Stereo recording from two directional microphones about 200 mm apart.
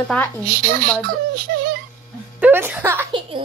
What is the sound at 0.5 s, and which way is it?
Speech, 45° right (ahead or behind).